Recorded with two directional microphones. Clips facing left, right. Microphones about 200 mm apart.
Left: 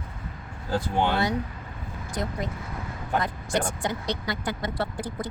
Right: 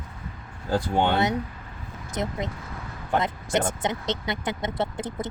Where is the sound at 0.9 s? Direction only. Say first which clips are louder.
Right 2 dB; 20° right (ahead or behind).